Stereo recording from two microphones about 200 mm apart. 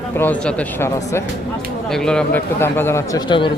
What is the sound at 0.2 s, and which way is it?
Speech, 10° left (ahead or behind).